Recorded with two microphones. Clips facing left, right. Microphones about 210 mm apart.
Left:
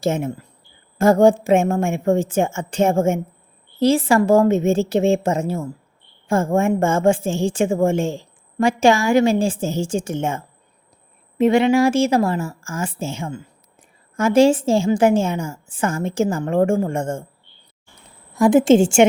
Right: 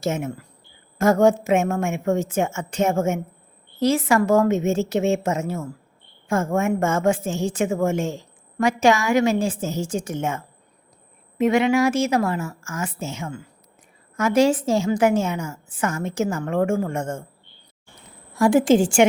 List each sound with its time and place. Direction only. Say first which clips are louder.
0.0 s a woman's voice: left 4 dB; 30° left (ahead or behind)
18.3 s a woman's voice: left 3 dB; 20° left (ahead or behind)